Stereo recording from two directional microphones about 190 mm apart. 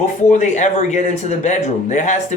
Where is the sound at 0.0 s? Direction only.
40° left (ahead or behind).